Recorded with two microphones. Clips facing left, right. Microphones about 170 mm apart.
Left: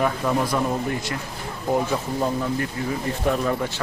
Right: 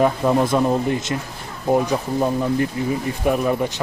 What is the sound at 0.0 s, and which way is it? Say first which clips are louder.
Speech: right 5 dB; 25° right (ahead or behind).